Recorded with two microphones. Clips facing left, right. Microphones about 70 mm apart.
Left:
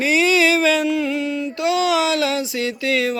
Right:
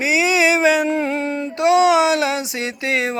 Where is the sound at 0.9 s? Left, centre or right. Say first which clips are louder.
Right 1 dB; right.